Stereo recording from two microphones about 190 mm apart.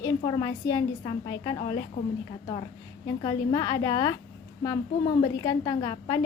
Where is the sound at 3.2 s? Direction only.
20° left (ahead or behind).